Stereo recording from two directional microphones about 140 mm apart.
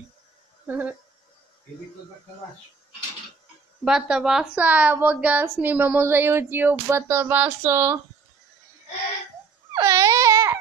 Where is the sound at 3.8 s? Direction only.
5° right (ahead or behind).